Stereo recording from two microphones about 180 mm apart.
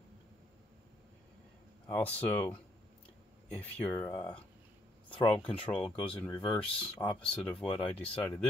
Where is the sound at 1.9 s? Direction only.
10° left (ahead or behind).